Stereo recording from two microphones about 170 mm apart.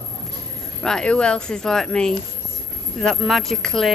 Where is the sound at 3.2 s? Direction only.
Centre (ahead or behind).